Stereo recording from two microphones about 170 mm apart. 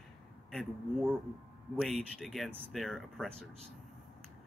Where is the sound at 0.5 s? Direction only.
Centre (ahead or behind).